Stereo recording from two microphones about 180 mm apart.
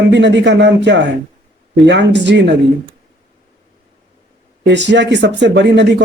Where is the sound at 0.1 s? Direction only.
75° right (ahead or behind).